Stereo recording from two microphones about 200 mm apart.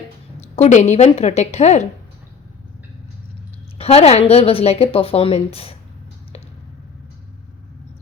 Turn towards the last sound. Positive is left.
turn(degrees=30)  # may be behind; listen again after turning